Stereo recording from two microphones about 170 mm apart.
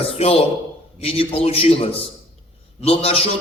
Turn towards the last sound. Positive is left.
turn(degrees=35)  # may be behind; listen again after turning